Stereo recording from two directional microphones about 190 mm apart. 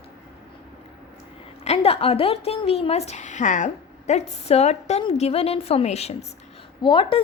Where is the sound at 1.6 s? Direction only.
30° left (ahead or behind).